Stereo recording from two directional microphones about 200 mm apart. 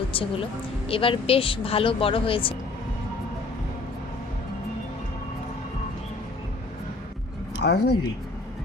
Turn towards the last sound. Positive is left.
turn(degrees=55)  # may be behind; listen again after turning